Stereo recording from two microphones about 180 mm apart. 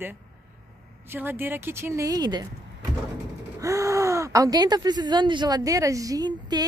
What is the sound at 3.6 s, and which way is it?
Speech, 15° right (ahead or behind).